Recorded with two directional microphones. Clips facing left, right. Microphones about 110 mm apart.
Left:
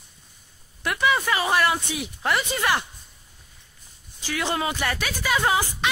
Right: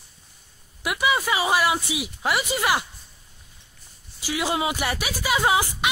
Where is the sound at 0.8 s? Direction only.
10° right (ahead or behind).